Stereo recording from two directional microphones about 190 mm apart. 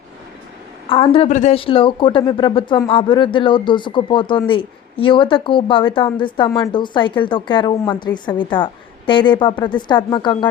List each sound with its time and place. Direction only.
0.9 s speech: 30° left (ahead or behind)